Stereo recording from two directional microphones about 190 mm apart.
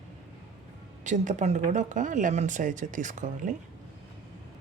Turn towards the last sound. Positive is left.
turn(degrees=-40)  # may be behind; listen again after turning